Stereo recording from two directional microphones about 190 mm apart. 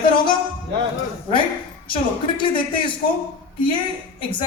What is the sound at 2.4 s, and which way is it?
Speech, 25° left (ahead or behind).